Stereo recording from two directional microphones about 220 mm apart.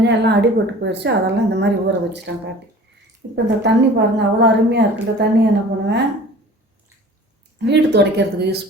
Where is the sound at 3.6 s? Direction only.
50° right (ahead or behind).